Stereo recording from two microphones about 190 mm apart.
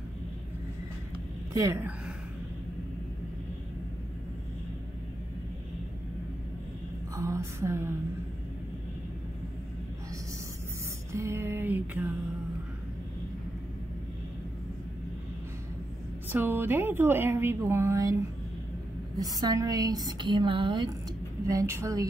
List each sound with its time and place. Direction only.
1.5 s a woman's voice: 15° right (ahead or behind)
7.2 s a sound: 15° right (ahead or behind)
11.1 s music: 15° right (ahead or behind)
16.3 s a woman's voice: 10° right (ahead or behind)
21.5 s a woman's voice: 15° right (ahead or behind)